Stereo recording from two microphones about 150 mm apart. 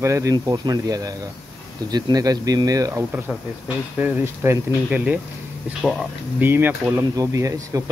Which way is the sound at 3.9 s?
10° right (ahead or behind).